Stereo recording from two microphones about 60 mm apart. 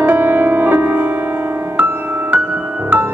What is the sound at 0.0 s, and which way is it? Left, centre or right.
Music, right.